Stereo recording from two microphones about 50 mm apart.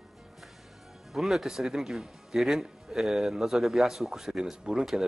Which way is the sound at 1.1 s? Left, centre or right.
Centre.